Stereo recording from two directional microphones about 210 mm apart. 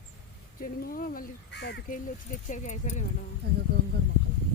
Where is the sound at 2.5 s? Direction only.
35° left (ahead or behind).